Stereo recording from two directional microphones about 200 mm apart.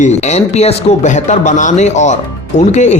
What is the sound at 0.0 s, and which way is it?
Speech, 35° left (ahead or behind).